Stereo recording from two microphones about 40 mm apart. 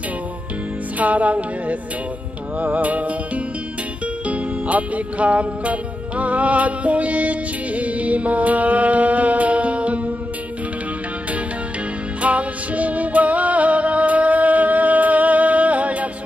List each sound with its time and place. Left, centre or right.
0.9 s music: right
4.3 s music: right
12.2 s music: right